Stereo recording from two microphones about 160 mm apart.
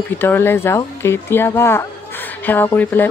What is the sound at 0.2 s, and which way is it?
Speech, 15° left (ahead or behind).